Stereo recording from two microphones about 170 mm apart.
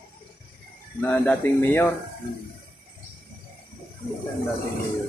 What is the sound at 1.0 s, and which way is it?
Speech, 10° left (ahead or behind).